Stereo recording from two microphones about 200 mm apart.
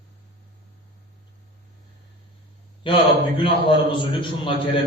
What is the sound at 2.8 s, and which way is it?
Speech, 25° left (ahead or behind).